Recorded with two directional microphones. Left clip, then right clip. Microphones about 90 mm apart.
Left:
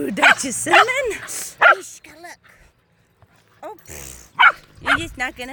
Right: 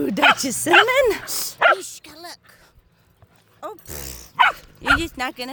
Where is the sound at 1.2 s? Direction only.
30° right (ahead or behind).